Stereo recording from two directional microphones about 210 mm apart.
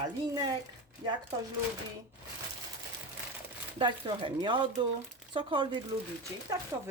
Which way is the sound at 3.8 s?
20° right (ahead or behind).